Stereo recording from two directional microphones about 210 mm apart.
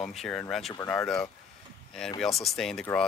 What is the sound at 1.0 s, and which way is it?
Speech, 5° left (ahead or behind).